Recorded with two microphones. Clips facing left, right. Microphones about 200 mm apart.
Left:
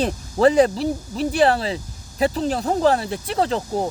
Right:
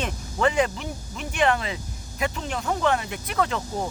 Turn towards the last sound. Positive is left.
turn(degrees=30)  # may be behind; listen again after turning